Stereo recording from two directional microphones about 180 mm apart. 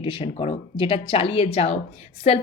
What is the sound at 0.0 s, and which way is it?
A woman's voice, 30° left (ahead or behind).